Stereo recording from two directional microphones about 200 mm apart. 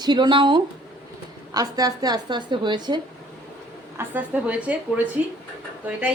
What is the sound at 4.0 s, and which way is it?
A woman's voice, 10° right (ahead or behind).